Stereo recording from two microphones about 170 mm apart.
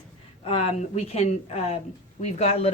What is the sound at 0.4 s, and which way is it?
Speech, 35° left (ahead or behind).